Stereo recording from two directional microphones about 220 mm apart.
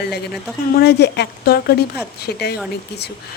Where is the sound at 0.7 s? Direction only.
50° left (ahead or behind).